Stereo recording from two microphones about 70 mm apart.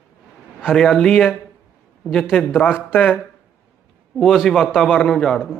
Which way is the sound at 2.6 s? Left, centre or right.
Left.